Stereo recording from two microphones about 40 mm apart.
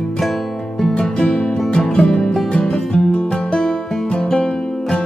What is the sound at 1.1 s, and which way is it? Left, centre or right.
Music, centre.